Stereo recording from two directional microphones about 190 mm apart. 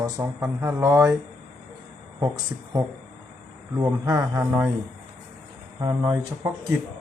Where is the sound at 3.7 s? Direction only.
20° right (ahead or behind).